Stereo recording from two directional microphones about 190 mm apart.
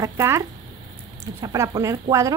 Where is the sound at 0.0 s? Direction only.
15° right (ahead or behind).